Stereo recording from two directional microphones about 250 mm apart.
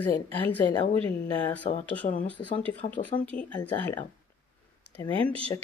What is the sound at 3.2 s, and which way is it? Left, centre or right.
Speech, centre.